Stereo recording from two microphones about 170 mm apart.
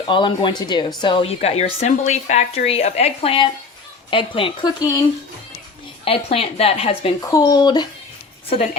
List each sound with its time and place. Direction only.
0.1 s a woman's voice: 30° left (ahead or behind)
6.1 s a woman's voice: 35° left (ahead or behind)
7.2 s speech: 20° left (ahead or behind)